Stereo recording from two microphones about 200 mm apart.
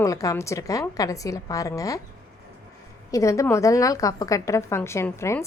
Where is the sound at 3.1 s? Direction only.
15° left (ahead or behind).